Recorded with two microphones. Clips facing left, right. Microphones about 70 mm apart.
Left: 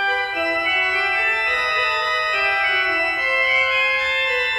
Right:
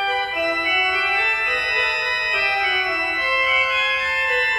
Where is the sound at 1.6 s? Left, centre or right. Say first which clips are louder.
Left 2 dB; left.